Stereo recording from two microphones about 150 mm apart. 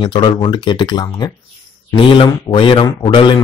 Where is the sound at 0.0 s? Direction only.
35° left (ahead or behind).